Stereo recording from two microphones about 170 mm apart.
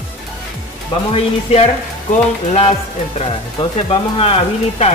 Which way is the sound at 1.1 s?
40° left (ahead or behind).